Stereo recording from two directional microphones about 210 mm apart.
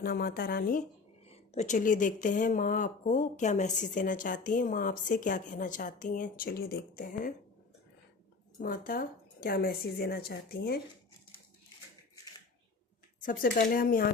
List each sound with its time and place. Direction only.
0.0 s speech: 45° left (ahead or behind)
1.2 s speech: 30° left (ahead or behind)
8.5 s speech: 40° left (ahead or behind)
13.2 s speech: 40° left (ahead or behind)